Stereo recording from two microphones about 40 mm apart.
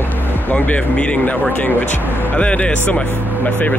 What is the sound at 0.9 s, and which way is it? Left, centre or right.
Speech, left.